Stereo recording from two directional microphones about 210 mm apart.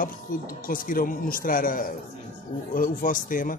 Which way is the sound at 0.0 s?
40° left (ahead or behind).